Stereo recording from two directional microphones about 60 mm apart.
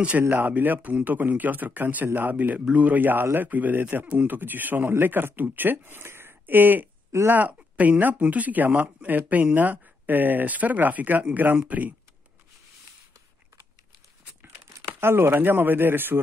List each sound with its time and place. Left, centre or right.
0.3 s speech: right
14.6 s speech: right